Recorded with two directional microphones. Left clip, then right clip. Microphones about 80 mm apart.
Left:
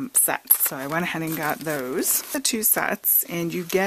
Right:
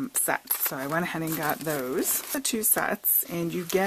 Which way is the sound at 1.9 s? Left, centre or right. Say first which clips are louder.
Left 3 dB; left.